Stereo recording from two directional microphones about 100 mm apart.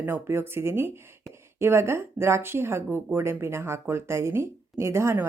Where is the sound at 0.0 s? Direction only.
25° right (ahead or behind).